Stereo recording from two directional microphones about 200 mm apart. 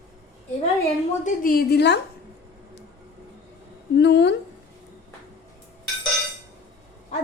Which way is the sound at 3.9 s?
60° left (ahead or behind).